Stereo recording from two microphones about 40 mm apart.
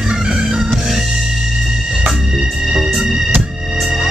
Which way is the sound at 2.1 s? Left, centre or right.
Centre.